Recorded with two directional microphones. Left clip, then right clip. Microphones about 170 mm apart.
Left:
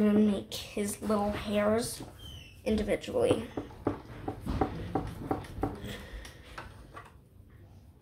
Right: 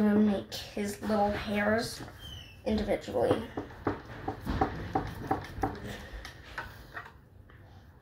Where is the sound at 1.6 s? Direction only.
40° left (ahead or behind).